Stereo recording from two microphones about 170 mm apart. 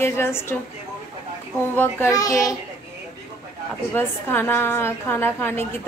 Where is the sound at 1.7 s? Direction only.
15° left (ahead or behind).